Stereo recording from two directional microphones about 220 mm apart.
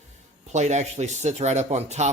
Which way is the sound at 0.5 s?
30° right (ahead or behind).